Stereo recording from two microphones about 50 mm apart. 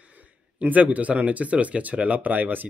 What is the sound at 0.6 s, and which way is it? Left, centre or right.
Speech, right.